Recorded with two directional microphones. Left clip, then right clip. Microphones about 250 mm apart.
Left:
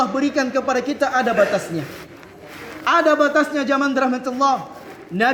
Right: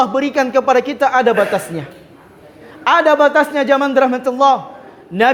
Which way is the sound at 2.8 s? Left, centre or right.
Right.